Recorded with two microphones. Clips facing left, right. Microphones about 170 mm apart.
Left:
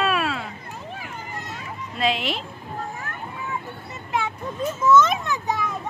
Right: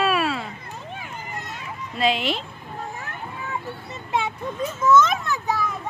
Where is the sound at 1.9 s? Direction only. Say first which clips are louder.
Right 2 dB; centre (ahead or behind).